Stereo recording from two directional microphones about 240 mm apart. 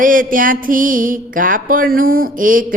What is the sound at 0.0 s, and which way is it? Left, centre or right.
Mantra, right.